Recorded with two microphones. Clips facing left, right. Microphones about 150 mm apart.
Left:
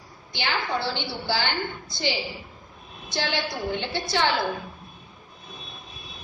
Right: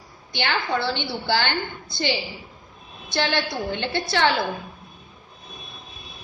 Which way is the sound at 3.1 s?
65° right (ahead or behind).